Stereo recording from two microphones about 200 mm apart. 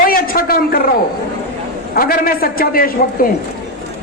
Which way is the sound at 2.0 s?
45° left (ahead or behind).